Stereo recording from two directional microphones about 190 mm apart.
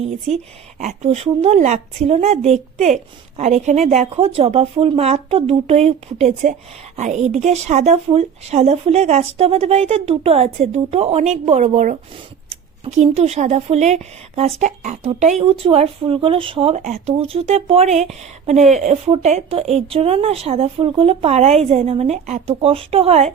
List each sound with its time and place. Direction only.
0.8 s speech: 35° right (ahead or behind)